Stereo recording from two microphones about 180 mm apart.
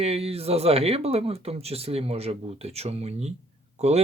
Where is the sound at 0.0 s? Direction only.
35° right (ahead or behind).